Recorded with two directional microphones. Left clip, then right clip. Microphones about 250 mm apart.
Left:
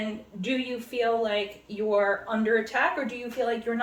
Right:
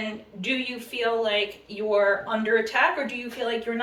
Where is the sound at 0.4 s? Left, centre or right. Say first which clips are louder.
Right 2 dB; centre.